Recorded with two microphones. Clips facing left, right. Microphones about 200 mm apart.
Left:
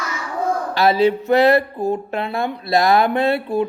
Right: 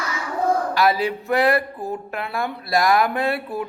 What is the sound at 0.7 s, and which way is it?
Speech, 25° left (ahead or behind).